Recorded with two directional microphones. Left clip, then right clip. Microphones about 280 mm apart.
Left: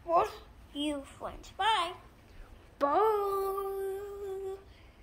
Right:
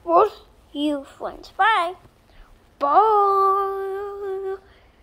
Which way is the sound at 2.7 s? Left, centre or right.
Centre.